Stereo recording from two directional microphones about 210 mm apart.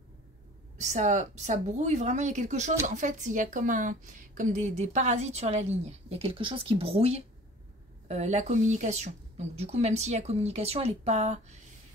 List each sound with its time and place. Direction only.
0.7 s speech: 35° right (ahead or behind)